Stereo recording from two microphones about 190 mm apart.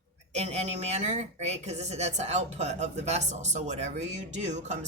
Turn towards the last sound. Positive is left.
turn(degrees=-40)  # may be behind; listen again after turning